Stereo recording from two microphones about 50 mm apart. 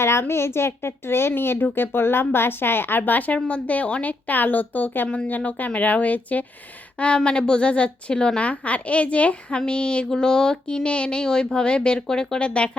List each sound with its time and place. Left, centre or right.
0.0 s a woman's voice: left
4.3 s a woman's voice: left
7.3 s a woman's voice: centre